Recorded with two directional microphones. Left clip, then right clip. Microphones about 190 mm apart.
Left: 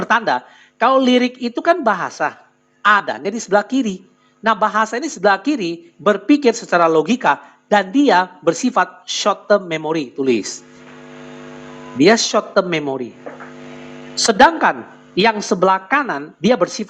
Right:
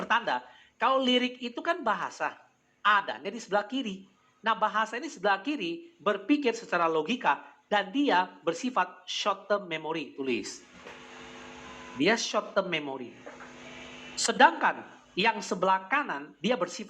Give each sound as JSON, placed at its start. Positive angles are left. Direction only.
{"t": 0.0, "sound": "a man's voice", "side_deg": 45}
{"t": 11.9, "sound": "a man's voice", "side_deg": 45}